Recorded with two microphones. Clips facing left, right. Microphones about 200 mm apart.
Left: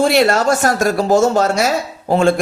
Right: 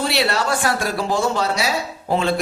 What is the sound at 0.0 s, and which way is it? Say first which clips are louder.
Speech: left 8 dB; 50° left (ahead or behind).